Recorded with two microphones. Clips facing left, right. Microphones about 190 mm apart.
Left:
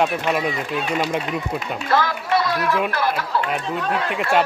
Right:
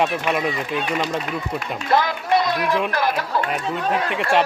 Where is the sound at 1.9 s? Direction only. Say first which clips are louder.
Right 1 dB; 20° right (ahead or behind).